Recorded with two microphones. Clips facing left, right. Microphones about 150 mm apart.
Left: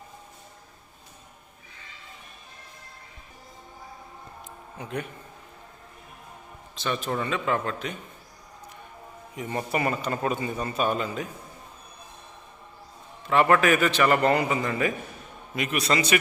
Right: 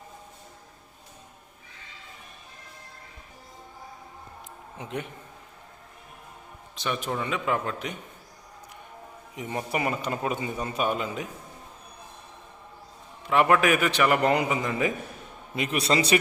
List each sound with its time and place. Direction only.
4.8 s a man's voice: 20° right (ahead or behind)
6.7 s a man's voice: 15° right (ahead or behind)
9.3 s a man's voice: 15° right (ahead or behind)
13.2 s a man's voice: 10° right (ahead or behind)
15.5 s a man's voice: 30° right (ahead or behind)